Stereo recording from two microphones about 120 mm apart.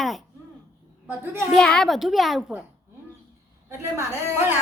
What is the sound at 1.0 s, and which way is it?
Speech, 20° right (ahead or behind).